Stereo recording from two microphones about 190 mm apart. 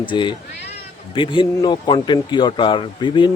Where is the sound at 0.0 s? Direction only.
25° left (ahead or behind).